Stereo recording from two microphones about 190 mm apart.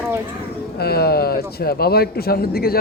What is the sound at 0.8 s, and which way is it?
A man's voice, 55° left (ahead or behind).